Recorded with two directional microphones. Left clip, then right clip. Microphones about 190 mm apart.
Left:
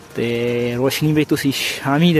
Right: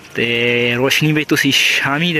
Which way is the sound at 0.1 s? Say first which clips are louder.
Right 5 dB; 10° left (ahead or behind).